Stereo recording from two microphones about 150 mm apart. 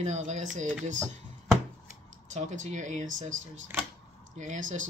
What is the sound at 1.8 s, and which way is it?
Speech, 55° right (ahead or behind).